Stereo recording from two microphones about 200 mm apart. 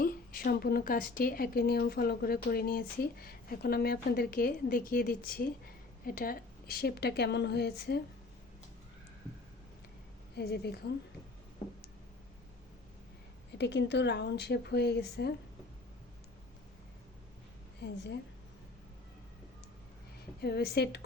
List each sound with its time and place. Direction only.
0.0 s a woman's voice: 45° left (ahead or behind)
10.3 s a woman's voice: 55° left (ahead or behind)
13.6 s a woman's voice: 60° left (ahead or behind)
17.7 s a woman's voice: 60° left (ahead or behind)
20.4 s a woman's voice: 55° left (ahead or behind)